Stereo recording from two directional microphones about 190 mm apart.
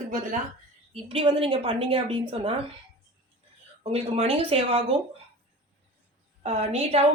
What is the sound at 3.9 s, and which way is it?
A woman's voice, 30° right (ahead or behind).